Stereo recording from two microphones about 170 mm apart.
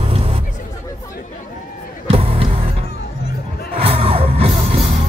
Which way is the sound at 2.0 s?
35° right (ahead or behind).